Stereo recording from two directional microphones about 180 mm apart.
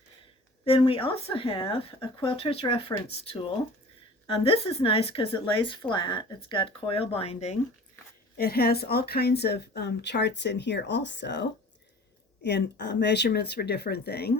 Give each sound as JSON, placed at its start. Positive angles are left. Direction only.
{"t": 0.6, "sound": "speech", "side_deg": 30}
{"t": 8.4, "sound": "speech", "side_deg": 55}
{"t": 12.5, "sound": "speech", "side_deg": 70}